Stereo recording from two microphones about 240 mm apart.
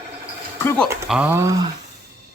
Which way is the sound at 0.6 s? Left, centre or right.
Centre.